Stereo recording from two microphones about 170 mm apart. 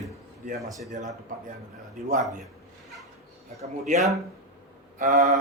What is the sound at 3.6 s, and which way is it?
A man's voice, 40° right (ahead or behind).